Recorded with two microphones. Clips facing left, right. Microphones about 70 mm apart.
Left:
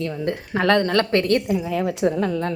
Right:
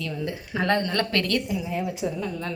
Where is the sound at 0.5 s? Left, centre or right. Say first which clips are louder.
Left 6 dB; left.